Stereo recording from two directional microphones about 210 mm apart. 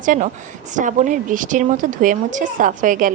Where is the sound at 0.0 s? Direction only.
40° right (ahead or behind).